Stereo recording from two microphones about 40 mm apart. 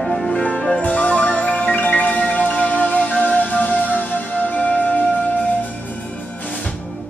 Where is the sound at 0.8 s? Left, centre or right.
Left.